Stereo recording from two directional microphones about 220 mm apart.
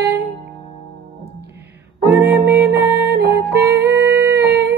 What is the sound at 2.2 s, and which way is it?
Music, 50° right (ahead or behind).